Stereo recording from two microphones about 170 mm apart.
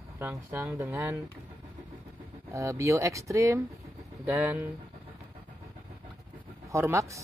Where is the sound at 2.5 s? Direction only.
15° right (ahead or behind).